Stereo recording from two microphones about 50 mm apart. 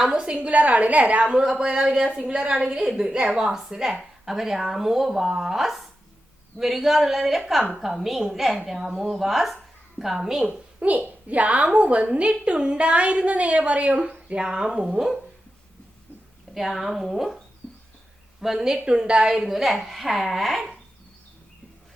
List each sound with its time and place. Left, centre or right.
0.3 s a woman's voice: right; by 15.2 s centre
16.6 s a woman's voice: centre
18.9 s a woman's voice: centre